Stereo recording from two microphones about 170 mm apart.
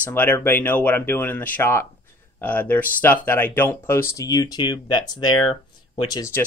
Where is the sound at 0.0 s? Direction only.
10° left (ahead or behind); by 6.2 s 30° left (ahead or behind).